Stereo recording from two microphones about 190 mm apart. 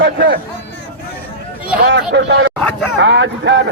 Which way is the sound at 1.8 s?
65° right (ahead or behind).